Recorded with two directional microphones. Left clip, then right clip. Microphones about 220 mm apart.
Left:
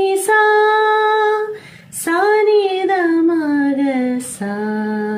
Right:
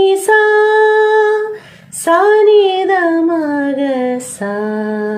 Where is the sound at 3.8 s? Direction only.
10° left (ahead or behind).